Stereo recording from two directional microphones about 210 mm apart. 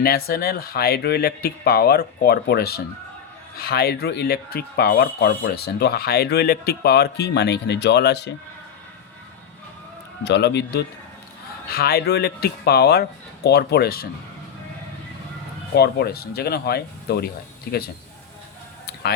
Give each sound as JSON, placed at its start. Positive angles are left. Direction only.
{"t": 0.0, "sound": "speech", "side_deg": 45}
{"t": 10.2, "sound": "speech", "side_deg": 55}
{"t": 15.7, "sound": "speech", "side_deg": 50}